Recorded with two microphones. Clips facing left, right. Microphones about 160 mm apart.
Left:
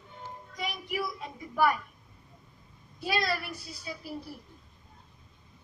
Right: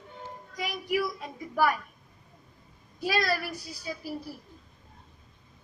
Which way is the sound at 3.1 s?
25° left (ahead or behind).